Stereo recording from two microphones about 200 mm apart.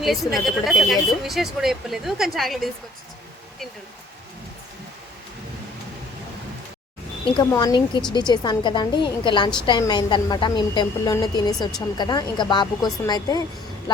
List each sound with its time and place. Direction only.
0.0 s a woman's voice: centre (ahead or behind)
7.3 s a woman's voice: 20° left (ahead or behind)